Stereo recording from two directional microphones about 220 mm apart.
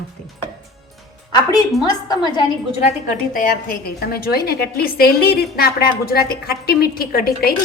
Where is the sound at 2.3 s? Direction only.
30° left (ahead or behind).